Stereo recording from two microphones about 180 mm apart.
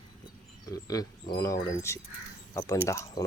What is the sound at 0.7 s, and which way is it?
Speech, 20° left (ahead or behind).